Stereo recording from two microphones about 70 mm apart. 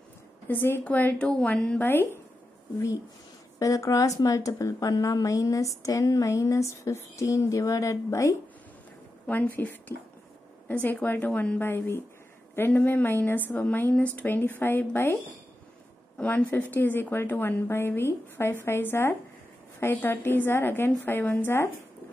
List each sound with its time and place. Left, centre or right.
0.5 s a woman's voice: left
0.8 s speech: left
1.8 s a woman's voice: left
3.5 s a woman's voice: left
9.3 s a woman's voice: left
11.6 s a woman's voice: left
16.2 s a woman's voice: left